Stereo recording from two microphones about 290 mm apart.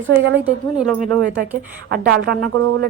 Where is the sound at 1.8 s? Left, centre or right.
Right.